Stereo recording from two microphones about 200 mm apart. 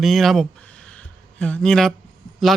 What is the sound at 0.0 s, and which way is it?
A man's voice, centre (ahead or behind).